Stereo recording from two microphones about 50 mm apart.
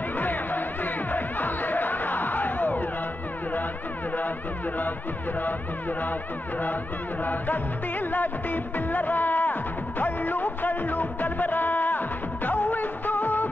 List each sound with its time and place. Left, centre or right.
0.2 s music: left
5.4 s speech: left
7.2 s music: left